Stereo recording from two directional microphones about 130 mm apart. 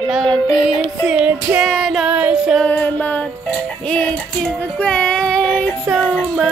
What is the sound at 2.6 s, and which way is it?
Music, 15° left (ahead or behind).